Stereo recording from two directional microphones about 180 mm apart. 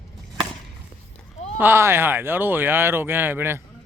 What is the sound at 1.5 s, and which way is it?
Speech, 15° right (ahead or behind).